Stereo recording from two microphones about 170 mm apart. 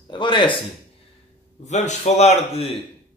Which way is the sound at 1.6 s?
45° left (ahead or behind).